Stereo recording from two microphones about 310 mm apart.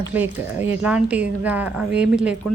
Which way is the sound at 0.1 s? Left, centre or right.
Centre.